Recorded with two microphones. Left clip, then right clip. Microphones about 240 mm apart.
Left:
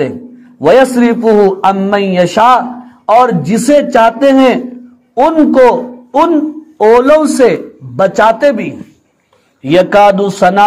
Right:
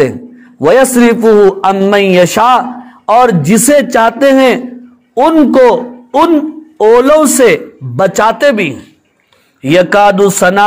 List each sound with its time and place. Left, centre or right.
0.6 s a man's voice: right